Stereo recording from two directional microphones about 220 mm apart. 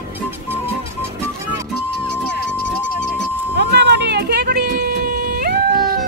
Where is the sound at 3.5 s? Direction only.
50° right (ahead or behind).